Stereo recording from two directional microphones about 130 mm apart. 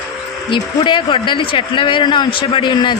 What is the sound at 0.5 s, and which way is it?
Speech, 40° left (ahead or behind).